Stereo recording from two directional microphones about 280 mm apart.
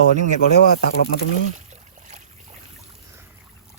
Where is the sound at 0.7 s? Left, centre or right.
Left.